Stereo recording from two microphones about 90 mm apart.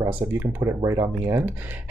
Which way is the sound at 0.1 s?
20° right (ahead or behind).